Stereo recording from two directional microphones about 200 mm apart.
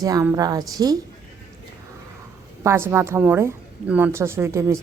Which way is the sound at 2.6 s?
10° right (ahead or behind).